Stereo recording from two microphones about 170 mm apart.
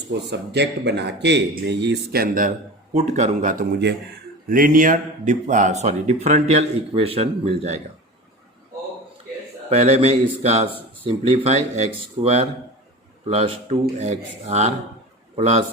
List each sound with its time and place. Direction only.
0.3 s speech: 85° right; by 2.5 s 55° right (ahead or behind)
2.9 s speech: 40° right (ahead or behind)
9.6 s speech: 40° right (ahead or behind)